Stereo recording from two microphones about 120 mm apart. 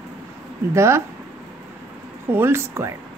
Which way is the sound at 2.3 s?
20° right (ahead or behind).